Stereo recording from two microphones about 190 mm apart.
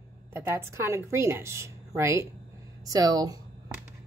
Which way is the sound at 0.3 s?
10° right (ahead or behind).